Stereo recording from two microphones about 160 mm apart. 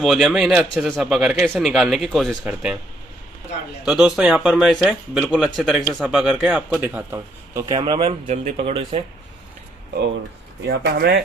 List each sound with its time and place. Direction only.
0.0 s a man's voice: centre (ahead or behind)
3.8 s a man's voice: centre (ahead or behind)
7.6 s speech: 25° right (ahead or behind)
8.3 s speech: 40° right (ahead or behind)
10.7 s speech: 90° right